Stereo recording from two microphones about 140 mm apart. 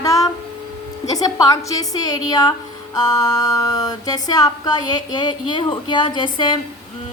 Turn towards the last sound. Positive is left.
turn(degrees=35)  # may be behind; listen again after turning